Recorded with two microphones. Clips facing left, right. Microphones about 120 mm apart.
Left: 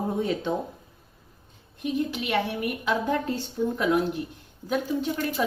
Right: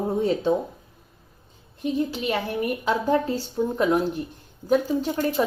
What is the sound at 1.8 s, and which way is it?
A woman's voice, 35° right (ahead or behind).